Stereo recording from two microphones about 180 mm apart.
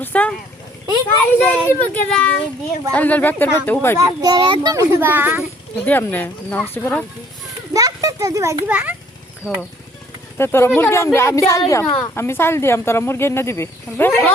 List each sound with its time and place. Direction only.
0.0 s speech: 10° left (ahead or behind)
1.4 s speech: 10° left (ahead or behind)
3.9 s a child's voice: 20° right (ahead or behind)
5.8 s speech: 10° left (ahead or behind)
7.7 s a child's voice: 20° right (ahead or behind)
10.3 s speech: 15° left (ahead or behind)